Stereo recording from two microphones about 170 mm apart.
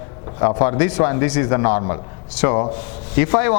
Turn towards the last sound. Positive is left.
turn(degrees=15)  # may be behind; listen again after turning